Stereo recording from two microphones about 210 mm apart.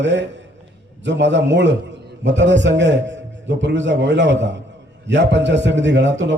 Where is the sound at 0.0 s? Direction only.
60° right (ahead or behind).